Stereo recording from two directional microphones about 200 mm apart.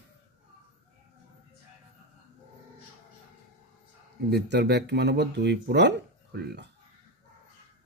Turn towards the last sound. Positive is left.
turn(degrees=-55)  # may be behind; listen again after turning